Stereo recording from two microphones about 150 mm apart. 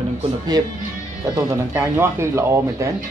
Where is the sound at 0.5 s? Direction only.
25° right (ahead or behind).